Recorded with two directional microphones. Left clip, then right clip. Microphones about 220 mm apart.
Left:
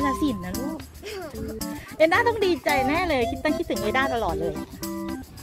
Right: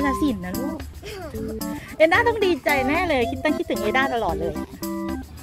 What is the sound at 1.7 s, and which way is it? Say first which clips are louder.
Speech: right 2 dB; 15° right (ahead or behind).